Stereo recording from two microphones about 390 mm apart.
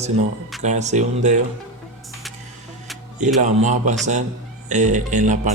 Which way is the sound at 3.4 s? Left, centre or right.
Centre.